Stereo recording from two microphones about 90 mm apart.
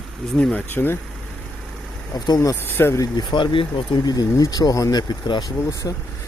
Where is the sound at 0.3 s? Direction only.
15° left (ahead or behind).